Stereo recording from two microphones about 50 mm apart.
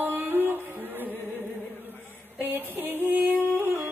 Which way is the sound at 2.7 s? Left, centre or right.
Right.